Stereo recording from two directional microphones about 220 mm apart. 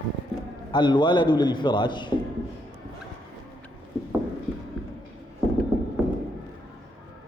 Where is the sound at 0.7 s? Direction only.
20° left (ahead or behind).